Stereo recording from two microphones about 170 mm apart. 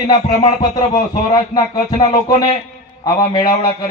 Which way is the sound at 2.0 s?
30° left (ahead or behind).